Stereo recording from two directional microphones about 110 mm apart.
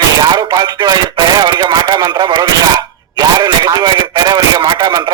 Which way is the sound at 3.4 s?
40° right (ahead or behind).